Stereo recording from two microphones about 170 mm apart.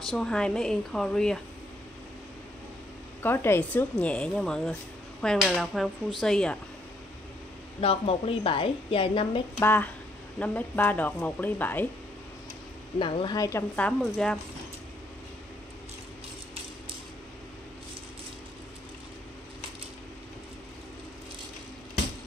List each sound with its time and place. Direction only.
0.1 s speech: 5° left (ahead or behind)
3.2 s speech: 10° left (ahead or behind)
7.8 s a woman's voice: 35° left (ahead or behind)
9.6 s speech: 10° left (ahead or behind)
13.0 s speech: 25° left (ahead or behind)
13.5 s speech: 10° left (ahead or behind)